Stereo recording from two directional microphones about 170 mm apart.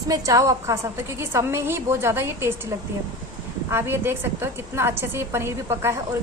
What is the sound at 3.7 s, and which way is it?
A woman's voice, 15° right (ahead or behind).